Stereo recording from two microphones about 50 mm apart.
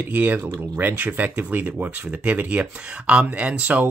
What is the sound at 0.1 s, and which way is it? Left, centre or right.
Speech, right.